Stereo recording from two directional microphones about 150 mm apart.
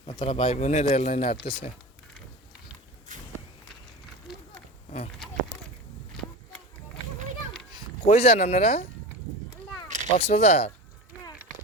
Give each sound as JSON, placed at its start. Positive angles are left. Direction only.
{"t": 0.2, "sound": "speech", "side_deg": 35}
{"t": 3.1, "sound": "walk", "side_deg": -55}
{"t": 8.0, "sound": "speech", "side_deg": 45}
{"t": 10.2, "sound": "speech", "side_deg": 45}